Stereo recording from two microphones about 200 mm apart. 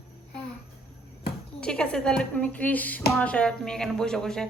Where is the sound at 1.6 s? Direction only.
5° left (ahead or behind).